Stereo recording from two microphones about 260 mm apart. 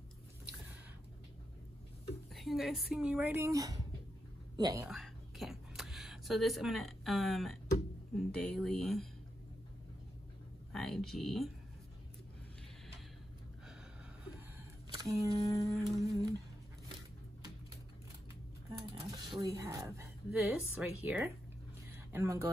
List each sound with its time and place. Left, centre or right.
2.3 s speech: centre
10.7 s speech: centre
15.0 s speech: centre
18.7 s a sound: centre
19.4 s speech: centre
21.9 s a sound: centre